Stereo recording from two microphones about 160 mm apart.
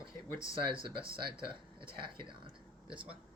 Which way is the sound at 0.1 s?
20° left (ahead or behind).